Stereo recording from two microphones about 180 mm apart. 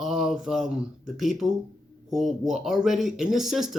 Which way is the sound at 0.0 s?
Centre (ahead or behind).